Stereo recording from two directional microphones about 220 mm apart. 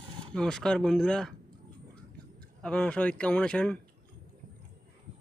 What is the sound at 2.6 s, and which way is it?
A man's voice, 5° left (ahead or behind).